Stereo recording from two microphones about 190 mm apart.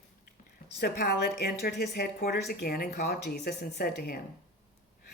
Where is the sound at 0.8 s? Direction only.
60° left (ahead or behind).